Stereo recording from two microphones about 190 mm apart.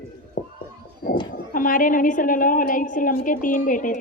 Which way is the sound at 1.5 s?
45° left (ahead or behind).